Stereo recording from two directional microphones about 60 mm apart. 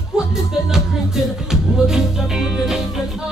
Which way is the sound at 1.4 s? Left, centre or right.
Centre.